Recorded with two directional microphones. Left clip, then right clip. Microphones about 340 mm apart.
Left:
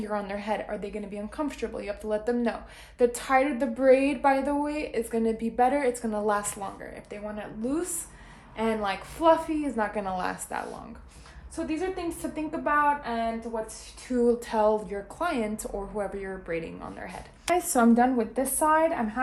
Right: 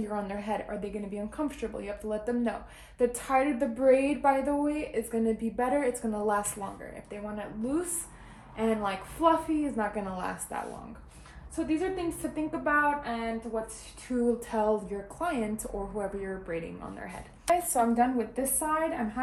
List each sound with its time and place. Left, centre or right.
0.0 s a woman's voice: centre
17.9 s a woman's voice: left